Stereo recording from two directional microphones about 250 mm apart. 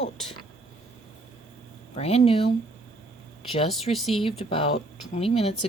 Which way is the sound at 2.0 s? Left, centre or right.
Left.